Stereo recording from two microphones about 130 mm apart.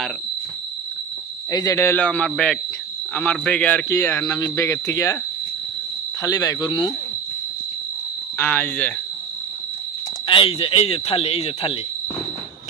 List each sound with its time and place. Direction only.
1.5 s a man's voice: 30° left (ahead or behind); by 3.8 s 10° left (ahead or behind)
3.8 s speech: 20° left (ahead or behind)
6.2 s speech: 25° left (ahead or behind)
8.4 s a man's voice: 15° left (ahead or behind)
10.2 s speech: 45° left (ahead or behind)